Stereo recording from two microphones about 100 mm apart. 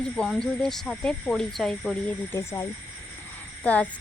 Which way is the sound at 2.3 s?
25° left (ahead or behind).